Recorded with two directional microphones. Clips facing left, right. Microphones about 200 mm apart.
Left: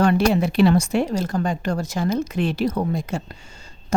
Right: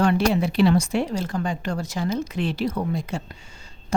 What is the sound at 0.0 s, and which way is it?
A woman's voice, 45° left (ahead or behind).